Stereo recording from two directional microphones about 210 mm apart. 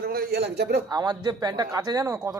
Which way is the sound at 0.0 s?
50° right (ahead or behind).